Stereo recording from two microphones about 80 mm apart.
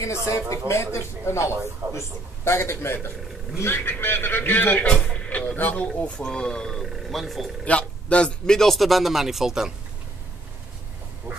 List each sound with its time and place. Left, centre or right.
0.0 s a man's voice: left
4.9 s a sound: centre
5.6 s speech: centre
7.6 s a man's voice: centre
11.3 s goose: right